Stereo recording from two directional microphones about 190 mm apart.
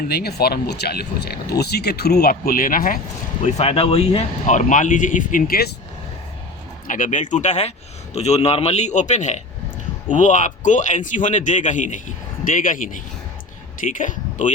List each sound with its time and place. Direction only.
0.1 s speech: 55° left (ahead or behind)
3.4 s a man's voice: 35° left (ahead or behind); by 5.7 s 50° left (ahead or behind)
6.8 s a man's voice: 45° left (ahead or behind)